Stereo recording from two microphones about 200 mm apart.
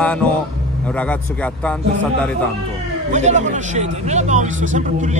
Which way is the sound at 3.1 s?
35° right (ahead or behind).